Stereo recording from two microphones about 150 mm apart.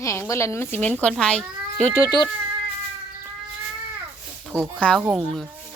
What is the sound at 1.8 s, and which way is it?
Speech, 20° left (ahead or behind).